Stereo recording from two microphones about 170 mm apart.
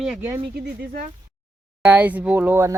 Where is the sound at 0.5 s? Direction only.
80° right.